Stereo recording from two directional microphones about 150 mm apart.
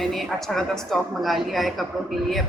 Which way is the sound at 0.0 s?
Centre (ahead or behind).